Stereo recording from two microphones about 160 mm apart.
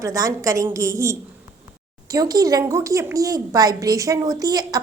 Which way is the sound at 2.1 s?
20° right (ahead or behind).